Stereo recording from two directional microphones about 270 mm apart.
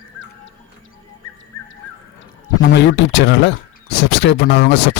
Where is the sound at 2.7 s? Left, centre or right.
Left.